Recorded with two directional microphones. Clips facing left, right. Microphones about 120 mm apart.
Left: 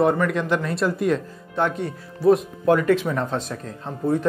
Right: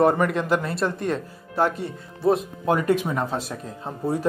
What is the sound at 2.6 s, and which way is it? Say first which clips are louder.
Speech: left 3 dB; 20° right (ahead or behind).